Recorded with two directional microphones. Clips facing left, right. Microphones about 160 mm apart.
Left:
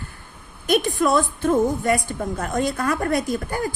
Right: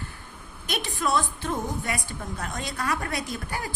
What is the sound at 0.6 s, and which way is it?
A woman's voice, 50° left (ahead or behind).